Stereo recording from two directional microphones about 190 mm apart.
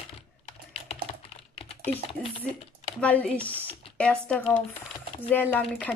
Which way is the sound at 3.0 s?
5° left (ahead or behind).